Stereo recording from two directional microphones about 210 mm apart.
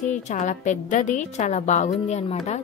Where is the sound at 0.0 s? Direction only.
35° left (ahead or behind).